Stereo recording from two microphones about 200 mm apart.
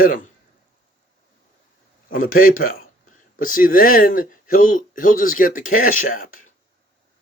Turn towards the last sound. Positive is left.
turn(degrees=40)  # may be behind; listen again after turning